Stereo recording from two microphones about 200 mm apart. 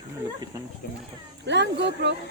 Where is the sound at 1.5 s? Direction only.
60° right (ahead or behind).